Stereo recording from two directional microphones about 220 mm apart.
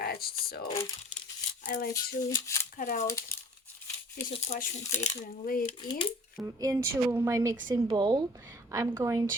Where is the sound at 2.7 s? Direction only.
35° left (ahead or behind).